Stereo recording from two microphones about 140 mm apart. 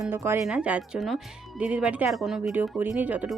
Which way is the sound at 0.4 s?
5° right (ahead or behind).